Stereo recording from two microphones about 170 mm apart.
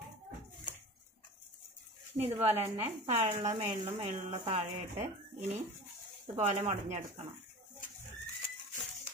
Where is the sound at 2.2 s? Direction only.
35° right (ahead or behind).